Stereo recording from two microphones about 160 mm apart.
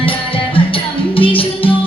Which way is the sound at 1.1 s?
35° left (ahead or behind).